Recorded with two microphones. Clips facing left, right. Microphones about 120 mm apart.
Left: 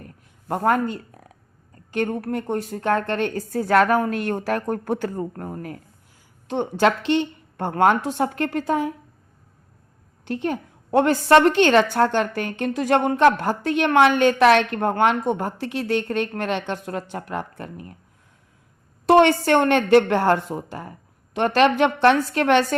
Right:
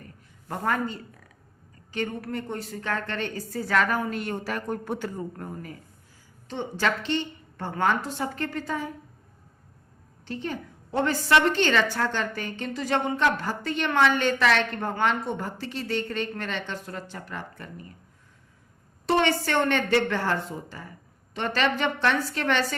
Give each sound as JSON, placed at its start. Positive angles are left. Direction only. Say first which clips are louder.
{"t": 0.0, "sound": "a woman's voice", "louder": "left 4 dB", "side_deg": 60}
{"t": 6.5, "sound": "a woman's voice", "louder": "left 8 dB", "side_deg": 60}
{"t": 10.2, "sound": "a woman's voice", "louder": "left 7 dB", "side_deg": 60}
{"t": 19.0, "sound": "a woman's voice", "louder": "left 8 dB", "side_deg": 60}